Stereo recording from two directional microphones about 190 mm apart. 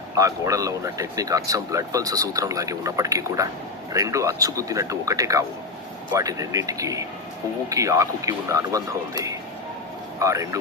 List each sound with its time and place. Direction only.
0.2 s speech: 15° right (ahead or behind)